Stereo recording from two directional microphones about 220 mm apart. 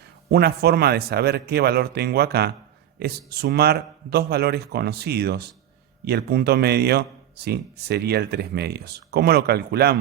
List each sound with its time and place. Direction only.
0.3 s speech: 45° right (ahead or behind)